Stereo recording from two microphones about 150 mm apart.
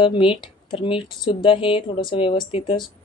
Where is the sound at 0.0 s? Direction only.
35° left (ahead or behind).